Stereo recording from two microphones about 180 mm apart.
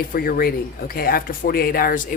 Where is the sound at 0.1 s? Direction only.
55° left (ahead or behind).